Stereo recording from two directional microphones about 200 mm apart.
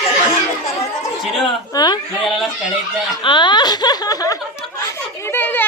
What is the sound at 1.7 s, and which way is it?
Speech, 20° left (ahead or behind).